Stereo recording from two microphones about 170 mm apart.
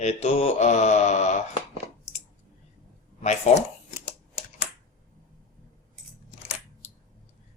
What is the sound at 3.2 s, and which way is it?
Speech, 40° left (ahead or behind).